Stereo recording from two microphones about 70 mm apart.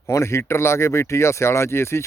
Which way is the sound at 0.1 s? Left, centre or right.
Left.